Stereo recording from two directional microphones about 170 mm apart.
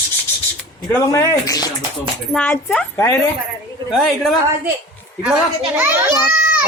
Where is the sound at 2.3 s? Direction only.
5° left (ahead or behind).